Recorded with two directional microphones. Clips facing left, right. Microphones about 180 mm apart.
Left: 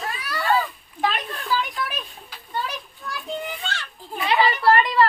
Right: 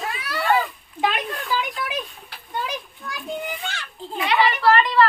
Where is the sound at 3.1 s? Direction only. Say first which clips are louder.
Right 1 dB; 15° right (ahead or behind).